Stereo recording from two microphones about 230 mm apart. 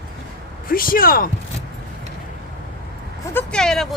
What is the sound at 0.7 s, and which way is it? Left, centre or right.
Speech, left.